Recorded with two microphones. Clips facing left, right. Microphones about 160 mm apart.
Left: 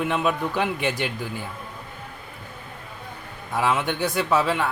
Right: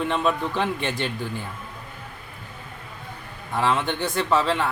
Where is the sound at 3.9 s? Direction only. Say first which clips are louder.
Even; 5° left (ahead or behind).